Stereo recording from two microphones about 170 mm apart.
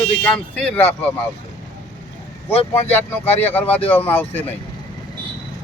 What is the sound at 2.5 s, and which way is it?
Speech, 35° left (ahead or behind).